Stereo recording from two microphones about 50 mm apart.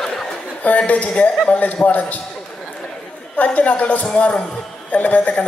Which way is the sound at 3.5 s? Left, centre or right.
Left.